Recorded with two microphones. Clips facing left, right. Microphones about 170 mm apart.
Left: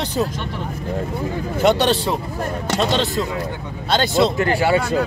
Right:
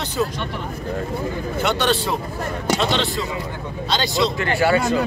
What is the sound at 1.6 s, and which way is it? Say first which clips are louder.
Speech: left 5 dB; 35° left (ahead or behind).